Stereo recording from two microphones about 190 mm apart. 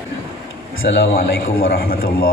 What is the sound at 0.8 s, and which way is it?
A man's voice, 55° left (ahead or behind).